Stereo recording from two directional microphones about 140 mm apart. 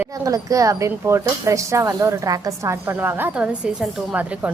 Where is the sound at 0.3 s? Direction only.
25° right (ahead or behind).